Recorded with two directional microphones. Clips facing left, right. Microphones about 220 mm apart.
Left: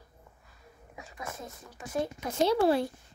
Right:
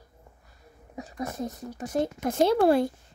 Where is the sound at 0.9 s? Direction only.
40° right (ahead or behind).